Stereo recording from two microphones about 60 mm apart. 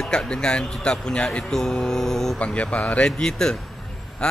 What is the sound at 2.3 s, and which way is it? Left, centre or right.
Speech, left.